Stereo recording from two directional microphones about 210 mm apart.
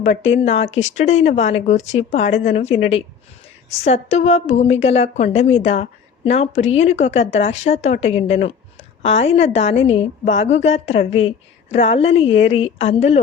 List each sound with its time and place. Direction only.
0.0 s a woman's voice: 35° left (ahead or behind)